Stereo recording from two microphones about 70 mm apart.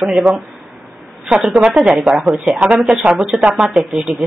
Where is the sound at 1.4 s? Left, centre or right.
Centre.